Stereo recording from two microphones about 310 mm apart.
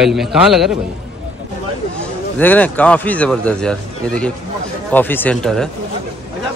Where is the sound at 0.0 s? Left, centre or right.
Centre.